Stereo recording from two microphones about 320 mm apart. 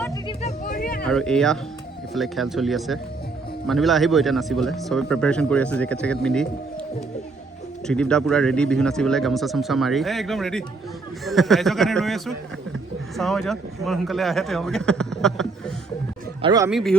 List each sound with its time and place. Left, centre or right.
0.0 s a sound: centre
0.6 s a sound: left
1.0 s speech: centre
7.9 s speech: centre
16.4 s speech: centre
16.6 s speech: centre